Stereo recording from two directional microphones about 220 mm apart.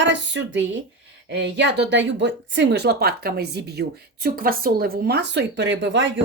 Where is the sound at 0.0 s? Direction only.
55° right (ahead or behind).